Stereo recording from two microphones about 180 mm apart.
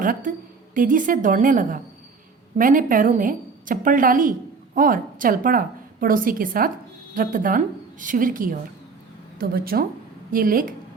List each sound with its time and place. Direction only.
0.0 s a woman's voice: 50° right (ahead or behind)